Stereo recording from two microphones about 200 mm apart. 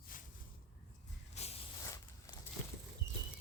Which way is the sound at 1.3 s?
30° left (ahead or behind).